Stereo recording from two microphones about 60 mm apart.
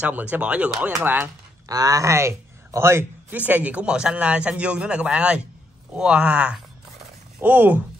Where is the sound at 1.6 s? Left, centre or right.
Right.